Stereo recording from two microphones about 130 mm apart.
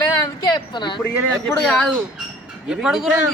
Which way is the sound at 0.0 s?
35° left (ahead or behind).